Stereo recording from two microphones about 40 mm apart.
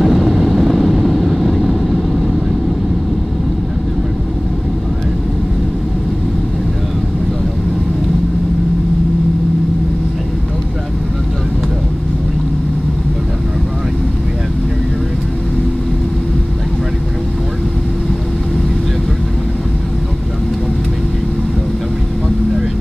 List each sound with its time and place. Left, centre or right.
0.0 s vehicle: centre